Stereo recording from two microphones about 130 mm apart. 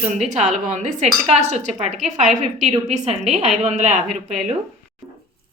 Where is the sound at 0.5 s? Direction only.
55° right (ahead or behind).